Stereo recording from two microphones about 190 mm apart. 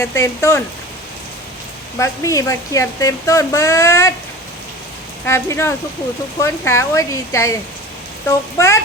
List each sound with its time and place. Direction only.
0.0 s speech: 15° left (ahead or behind)
2.0 s speech: 15° left (ahead or behind)
5.2 s speech: 15° left (ahead or behind)